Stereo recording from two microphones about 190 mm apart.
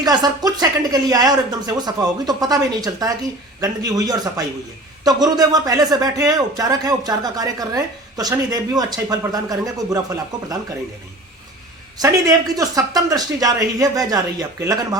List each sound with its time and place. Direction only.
0.0 s a man's voice: 20° right (ahead or behind)
11.9 s a man's voice: 20° right (ahead or behind)